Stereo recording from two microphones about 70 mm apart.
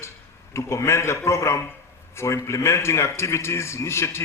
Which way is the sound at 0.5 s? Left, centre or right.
Left.